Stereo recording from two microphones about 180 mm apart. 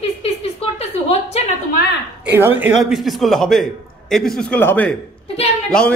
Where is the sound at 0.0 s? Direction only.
35° left (ahead or behind).